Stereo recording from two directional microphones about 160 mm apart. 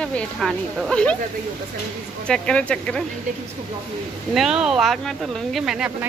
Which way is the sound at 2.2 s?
5° left (ahead or behind).